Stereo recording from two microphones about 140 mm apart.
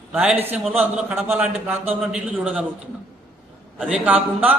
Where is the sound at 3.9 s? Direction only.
10° right (ahead or behind).